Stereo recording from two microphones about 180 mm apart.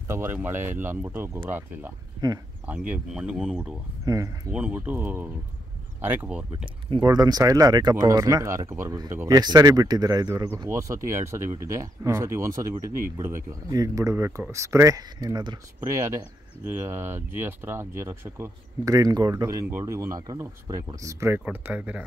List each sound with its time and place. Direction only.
0.1 s speech: 10° right (ahead or behind)
2.9 s speech: 5° right (ahead or behind)
4.0 s speech: 20° right (ahead or behind)
4.5 s speech: 5° right (ahead or behind)
6.9 s speech: 20° right (ahead or behind)
16.6 s speech: 10° right (ahead or behind)